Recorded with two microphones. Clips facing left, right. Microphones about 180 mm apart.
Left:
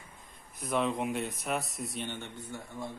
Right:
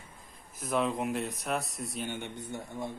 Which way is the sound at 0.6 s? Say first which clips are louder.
Even; centre (ahead or behind).